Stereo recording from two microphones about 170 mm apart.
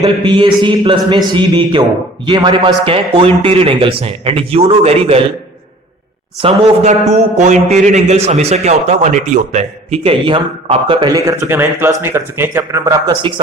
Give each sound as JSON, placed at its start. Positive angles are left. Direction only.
{"t": 0.0, "sound": "a man's voice", "side_deg": -30}
{"t": 6.4, "sound": "a man's voice", "side_deg": -30}
{"t": 7.1, "sound": "a man's voice", "side_deg": -45}
{"t": 13.2, "sound": "speech", "side_deg": -30}